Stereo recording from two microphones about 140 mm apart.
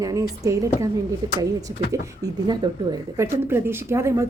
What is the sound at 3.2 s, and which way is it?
Speech, 15° right (ahead or behind).